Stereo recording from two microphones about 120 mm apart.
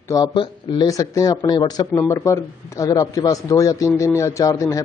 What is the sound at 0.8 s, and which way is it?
Speech, 30° left (ahead or behind).